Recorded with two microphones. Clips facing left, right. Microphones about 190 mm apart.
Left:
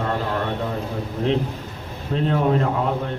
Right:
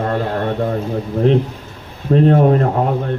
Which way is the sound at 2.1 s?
50° right (ahead or behind).